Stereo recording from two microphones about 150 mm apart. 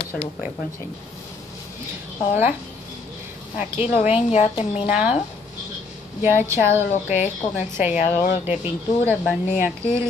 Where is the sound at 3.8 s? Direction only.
40° left (ahead or behind).